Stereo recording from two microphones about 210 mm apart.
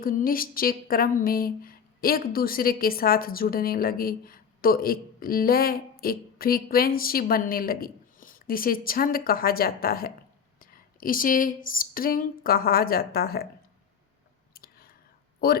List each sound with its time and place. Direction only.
0.0 s speech: 45° left (ahead or behind)
14.5 s whispering: 45° left (ahead or behind)
15.4 s speech: 45° left (ahead or behind)